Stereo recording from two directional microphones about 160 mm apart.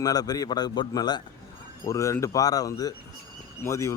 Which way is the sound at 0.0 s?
25° left (ahead or behind).